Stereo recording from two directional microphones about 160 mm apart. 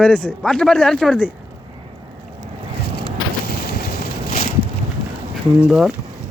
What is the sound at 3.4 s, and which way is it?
Vehicle, 75° left (ahead or behind).